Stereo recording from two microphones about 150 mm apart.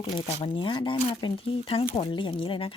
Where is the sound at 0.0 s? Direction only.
40° left (ahead or behind).